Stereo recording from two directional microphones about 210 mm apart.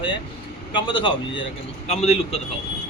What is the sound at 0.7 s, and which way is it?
Speech, 25° left (ahead or behind).